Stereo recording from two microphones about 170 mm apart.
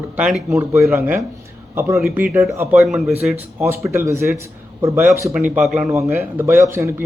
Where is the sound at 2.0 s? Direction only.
5° right (ahead or behind).